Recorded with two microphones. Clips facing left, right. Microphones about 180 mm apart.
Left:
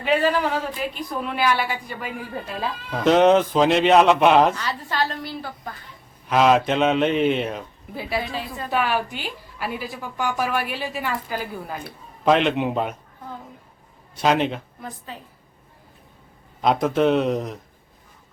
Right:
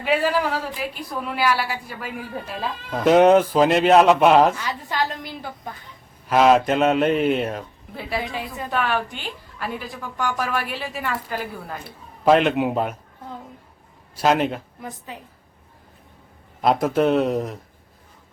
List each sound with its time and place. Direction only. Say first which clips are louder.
0.0 s a woman's voice: left 1 dB; 5° right (ahead or behind)
4.7 s a woman's voice: even; 15° right (ahead or behind)
6.2 s speech: right 2 dB; centre (ahead or behind)
8.2 s a woman's voice: even; 15° right (ahead or behind)
8.7 s speech: left 1 dB; 5° left (ahead or behind)
14.2 s speech: right 1 dB; 5° right (ahead or behind)
14.8 s a woman's voice: right 1 dB; 15° right (ahead or behind)
16.6 s speech: right 1 dB; 5° right (ahead or behind)